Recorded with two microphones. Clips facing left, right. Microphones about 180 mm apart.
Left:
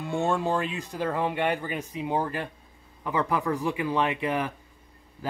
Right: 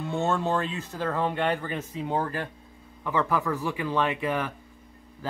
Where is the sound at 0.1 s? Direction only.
10° left (ahead or behind).